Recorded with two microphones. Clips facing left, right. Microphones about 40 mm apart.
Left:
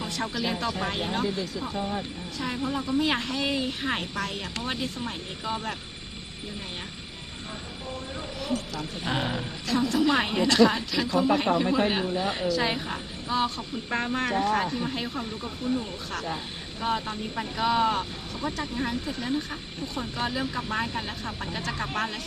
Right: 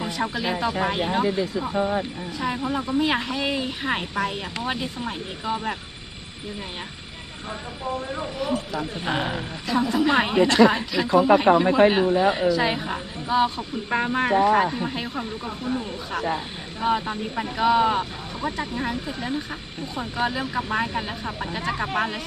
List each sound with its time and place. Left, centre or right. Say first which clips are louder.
0.0 s speech: right 4 dB; centre
2.4 s speech: right 4 dB; centre
8.4 s speech: right 4 dB; centre
11.2 s speech: right 7 dB; centre
12.3 s speech: right 5 dB; centre
15.4 s speech: even; right
16.8 s speech: right 5 dB; centre